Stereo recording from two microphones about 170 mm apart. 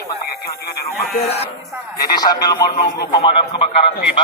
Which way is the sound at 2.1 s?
25° left (ahead or behind).